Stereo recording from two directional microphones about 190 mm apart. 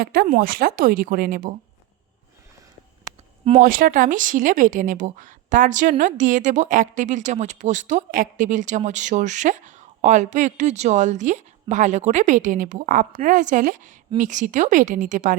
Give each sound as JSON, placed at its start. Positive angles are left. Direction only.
{"t": 0.0, "sound": "speech", "side_deg": -50}
{"t": 3.6, "sound": "speech", "side_deg": -50}